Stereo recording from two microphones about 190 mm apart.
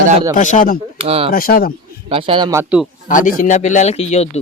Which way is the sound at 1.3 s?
50° left (ahead or behind).